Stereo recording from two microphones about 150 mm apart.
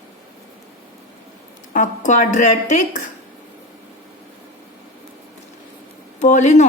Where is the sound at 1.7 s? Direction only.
55° left (ahead or behind).